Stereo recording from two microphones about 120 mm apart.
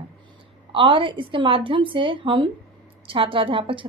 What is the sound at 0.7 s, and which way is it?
Speech, 45° right (ahead or behind).